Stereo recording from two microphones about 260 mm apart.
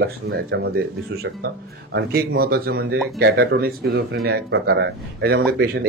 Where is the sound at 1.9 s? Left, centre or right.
Right.